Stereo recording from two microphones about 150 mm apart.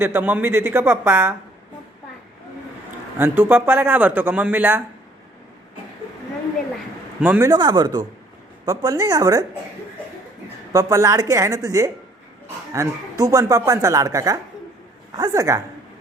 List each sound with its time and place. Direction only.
0.0 s speech: 15° right (ahead or behind)
3.2 s speech: 15° right (ahead or behind)
7.2 s speech: 10° right (ahead or behind)
7.5 s speech: 30° right (ahead or behind)
10.7 s speech: 20° right (ahead or behind)